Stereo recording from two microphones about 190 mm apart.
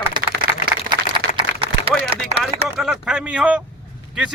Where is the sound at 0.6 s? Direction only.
25° right (ahead or behind).